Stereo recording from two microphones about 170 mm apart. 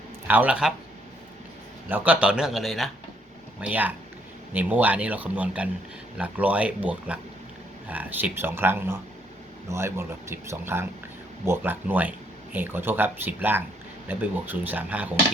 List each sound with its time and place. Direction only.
0.3 s speech: 10° right (ahead or behind)
1.9 s a man's voice: 10° right (ahead or behind)